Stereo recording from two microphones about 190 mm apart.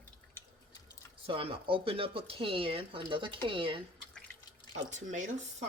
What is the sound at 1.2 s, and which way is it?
Speech, 30° right (ahead or behind).